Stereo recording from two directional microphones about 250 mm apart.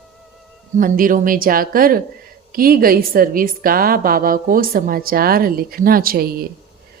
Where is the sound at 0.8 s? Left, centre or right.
Right.